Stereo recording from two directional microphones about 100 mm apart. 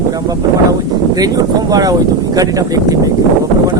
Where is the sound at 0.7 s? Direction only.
40° right (ahead or behind).